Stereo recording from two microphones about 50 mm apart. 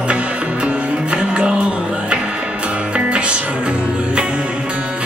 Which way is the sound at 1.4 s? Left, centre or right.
Centre.